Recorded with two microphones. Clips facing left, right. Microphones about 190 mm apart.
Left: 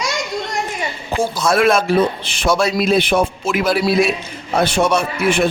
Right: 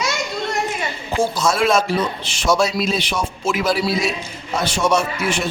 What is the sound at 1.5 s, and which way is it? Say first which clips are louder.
A man's voice: left 5 dB; 60° left (ahead or behind).